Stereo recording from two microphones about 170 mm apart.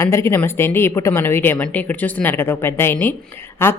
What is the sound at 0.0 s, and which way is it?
A woman's voice, 15° left (ahead or behind).